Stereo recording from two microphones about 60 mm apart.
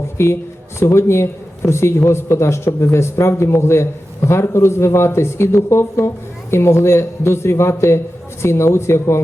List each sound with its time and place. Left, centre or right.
0.2 s speech: left